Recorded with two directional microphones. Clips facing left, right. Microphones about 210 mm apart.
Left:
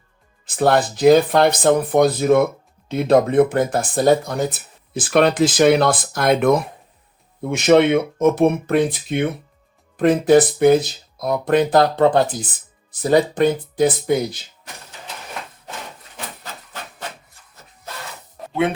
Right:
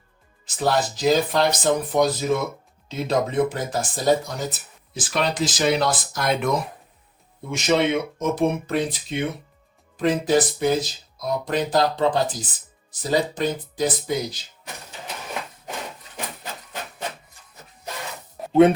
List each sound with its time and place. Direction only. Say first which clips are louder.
0.4 s speech: left 5 dB; 55° left (ahead or behind)